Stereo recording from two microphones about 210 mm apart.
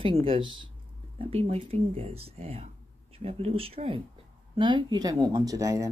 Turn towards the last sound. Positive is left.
turn(degrees=-15)  # may be behind; listen again after turning